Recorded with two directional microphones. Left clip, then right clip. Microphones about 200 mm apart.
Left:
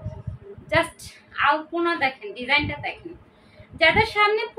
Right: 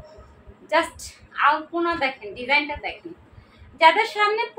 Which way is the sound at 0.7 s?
10° left (ahead or behind).